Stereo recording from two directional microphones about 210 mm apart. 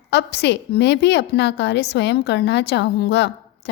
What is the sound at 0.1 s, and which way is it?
A woman's voice, 55° left (ahead or behind).